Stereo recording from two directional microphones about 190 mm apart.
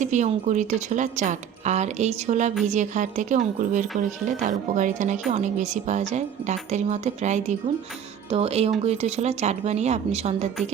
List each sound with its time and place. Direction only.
0.0 s speech: 40° right (ahead or behind)